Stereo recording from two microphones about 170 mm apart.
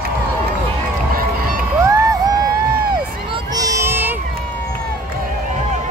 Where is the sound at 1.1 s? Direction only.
60° right (ahead or behind).